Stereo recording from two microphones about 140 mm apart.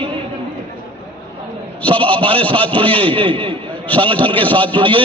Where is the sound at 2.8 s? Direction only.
35° right (ahead or behind).